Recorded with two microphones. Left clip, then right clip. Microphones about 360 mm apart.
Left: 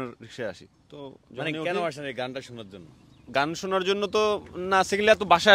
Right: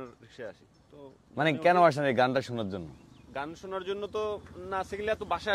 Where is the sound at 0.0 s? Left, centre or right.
Left.